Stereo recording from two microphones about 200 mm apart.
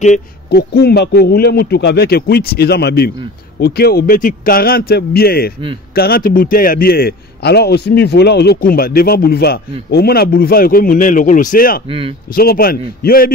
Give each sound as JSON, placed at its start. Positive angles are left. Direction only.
{"t": 0.5, "sound": "a man's voice", "side_deg": 50}